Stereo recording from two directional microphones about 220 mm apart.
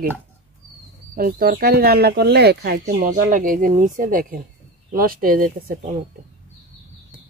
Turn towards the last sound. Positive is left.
turn(degrees=-35)  # may be behind; listen again after turning